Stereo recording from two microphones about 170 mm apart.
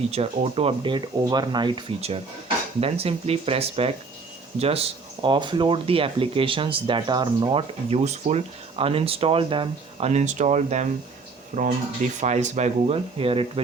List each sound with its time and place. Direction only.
0.1 s speech: 35° right (ahead or behind)